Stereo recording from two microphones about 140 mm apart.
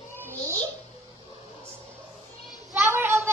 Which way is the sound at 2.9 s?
20° right (ahead or behind).